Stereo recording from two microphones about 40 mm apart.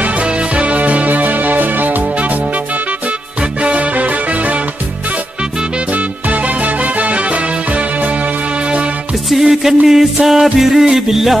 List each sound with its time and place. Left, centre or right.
0.0 s music: right
3.6 s music: right
5.9 s music: right
9.4 s music: centre